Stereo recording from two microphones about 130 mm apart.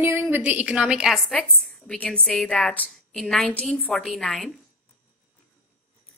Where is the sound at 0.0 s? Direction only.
20° right (ahead or behind); by 4.5 s centre (ahead or behind).